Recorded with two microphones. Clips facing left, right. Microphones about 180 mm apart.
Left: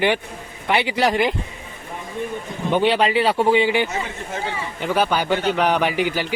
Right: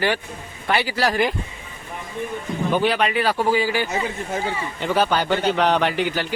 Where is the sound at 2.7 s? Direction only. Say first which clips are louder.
Left 3 dB; 25° left (ahead or behind).